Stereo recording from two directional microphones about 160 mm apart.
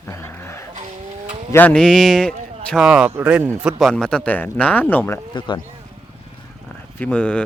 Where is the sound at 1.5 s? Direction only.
10° left (ahead or behind); by 3.7 s 10° right (ahead or behind).